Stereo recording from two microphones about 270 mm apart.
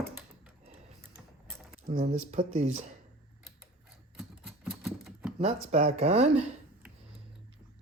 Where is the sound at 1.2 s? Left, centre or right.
Centre.